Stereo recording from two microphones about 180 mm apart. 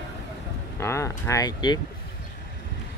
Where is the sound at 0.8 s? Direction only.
15° left (ahead or behind).